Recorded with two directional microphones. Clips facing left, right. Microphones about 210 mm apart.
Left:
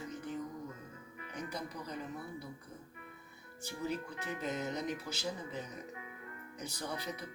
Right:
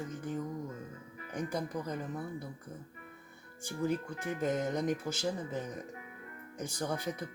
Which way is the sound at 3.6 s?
50° right (ahead or behind).